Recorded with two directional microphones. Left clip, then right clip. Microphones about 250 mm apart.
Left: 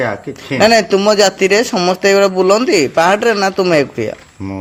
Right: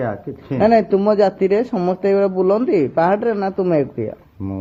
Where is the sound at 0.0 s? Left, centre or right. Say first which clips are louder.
Left 6 dB; centre.